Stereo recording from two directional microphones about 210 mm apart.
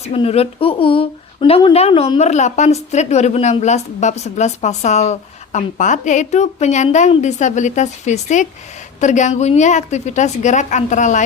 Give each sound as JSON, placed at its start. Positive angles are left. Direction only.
{"t": 0.0, "sound": "speech", "side_deg": 30}